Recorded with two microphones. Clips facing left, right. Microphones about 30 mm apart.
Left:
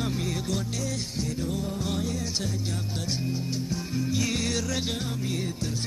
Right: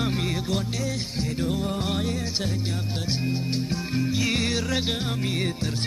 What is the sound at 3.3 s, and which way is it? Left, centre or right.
Music, right.